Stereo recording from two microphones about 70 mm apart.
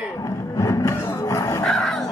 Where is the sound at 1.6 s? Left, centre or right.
Centre.